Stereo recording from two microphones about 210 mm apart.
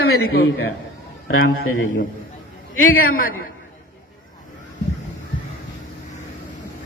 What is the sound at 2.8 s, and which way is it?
Speech, 40° left (ahead or behind).